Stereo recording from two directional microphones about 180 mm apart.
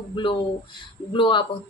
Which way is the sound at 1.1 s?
25° left (ahead or behind).